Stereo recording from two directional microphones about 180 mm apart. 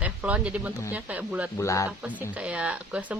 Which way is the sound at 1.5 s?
15° left (ahead or behind).